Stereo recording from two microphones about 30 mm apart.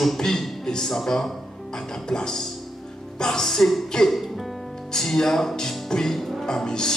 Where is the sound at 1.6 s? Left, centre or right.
Left; by 4.7 s centre.